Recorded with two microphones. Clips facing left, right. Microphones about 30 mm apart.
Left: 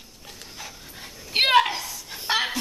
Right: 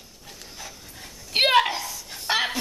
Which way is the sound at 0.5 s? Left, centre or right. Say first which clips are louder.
Left 1 dB; centre.